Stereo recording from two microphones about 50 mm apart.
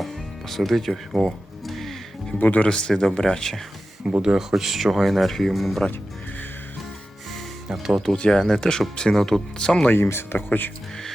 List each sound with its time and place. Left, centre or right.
0.0 s music: centre
2.4 s speech: left
2.6 s speech: centre
4.2 s speech: centre
7.7 s speech: centre
8.1 s speech: centre
9.6 s speech: centre
9.9 s speech: left
10.3 s speech: left